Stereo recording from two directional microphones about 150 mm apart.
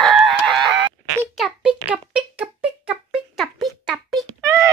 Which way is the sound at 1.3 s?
5° right (ahead or behind).